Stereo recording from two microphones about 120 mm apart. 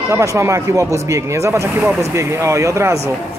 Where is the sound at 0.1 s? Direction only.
25° right (ahead or behind).